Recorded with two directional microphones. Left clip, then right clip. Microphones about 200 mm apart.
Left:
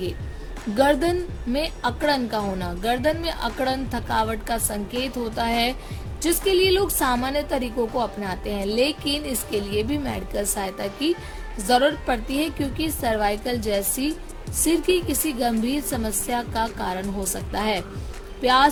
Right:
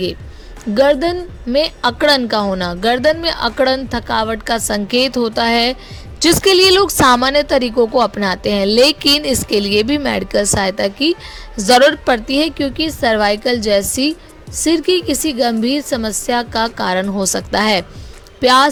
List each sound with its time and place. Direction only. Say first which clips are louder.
0.8 s a woman's voice: right 7 dB; 30° right (ahead or behind)